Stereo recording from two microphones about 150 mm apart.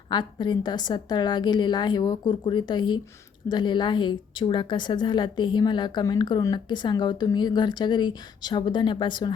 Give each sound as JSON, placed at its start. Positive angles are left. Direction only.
{"t": 0.1, "sound": "a woman's voice", "side_deg": 30}